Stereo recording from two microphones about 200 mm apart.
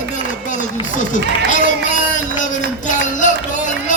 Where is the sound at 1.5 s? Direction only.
40° left (ahead or behind).